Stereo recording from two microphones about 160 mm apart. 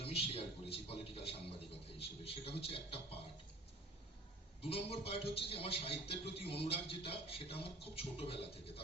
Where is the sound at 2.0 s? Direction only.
35° left (ahead or behind).